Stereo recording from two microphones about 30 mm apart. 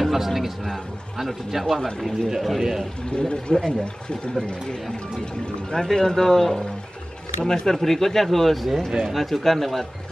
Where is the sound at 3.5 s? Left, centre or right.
Left.